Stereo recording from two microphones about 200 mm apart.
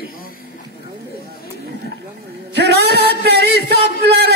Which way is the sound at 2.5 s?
55° right (ahead or behind).